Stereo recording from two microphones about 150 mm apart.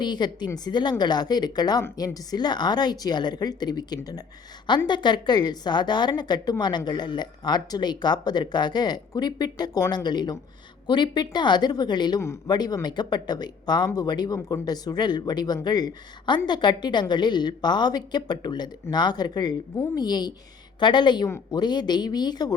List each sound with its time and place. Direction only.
0.0 s a woman's voice: 30° left (ahead or behind)